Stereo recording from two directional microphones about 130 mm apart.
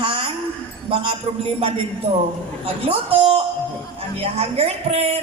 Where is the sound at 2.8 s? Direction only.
50° right (ahead or behind).